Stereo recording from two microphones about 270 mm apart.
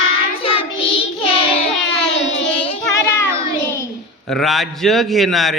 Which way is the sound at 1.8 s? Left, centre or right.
Left.